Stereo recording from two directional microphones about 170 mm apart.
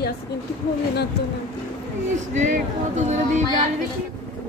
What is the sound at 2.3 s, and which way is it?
Speech, 45° right (ahead or behind).